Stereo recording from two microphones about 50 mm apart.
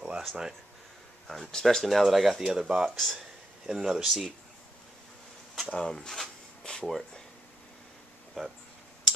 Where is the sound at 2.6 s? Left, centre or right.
Right.